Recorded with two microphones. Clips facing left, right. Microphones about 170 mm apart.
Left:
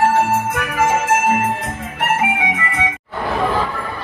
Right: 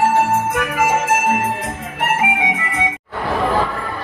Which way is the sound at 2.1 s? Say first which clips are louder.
Even; 15° right (ahead or behind).